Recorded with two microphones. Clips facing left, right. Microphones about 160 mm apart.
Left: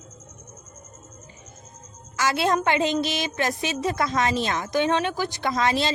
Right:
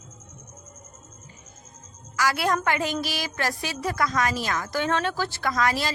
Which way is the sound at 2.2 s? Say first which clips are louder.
Left 2 dB; 25° left (ahead or behind).